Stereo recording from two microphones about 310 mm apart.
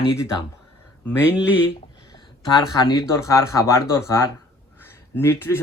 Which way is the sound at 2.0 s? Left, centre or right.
Centre.